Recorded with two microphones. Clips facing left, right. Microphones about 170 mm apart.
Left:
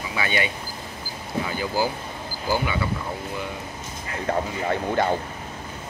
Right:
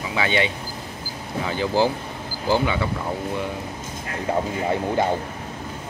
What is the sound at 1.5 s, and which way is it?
Speech, 25° right (ahead or behind).